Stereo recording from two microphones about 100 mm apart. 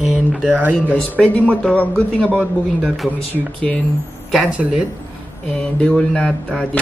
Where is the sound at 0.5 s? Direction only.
15° right (ahead or behind).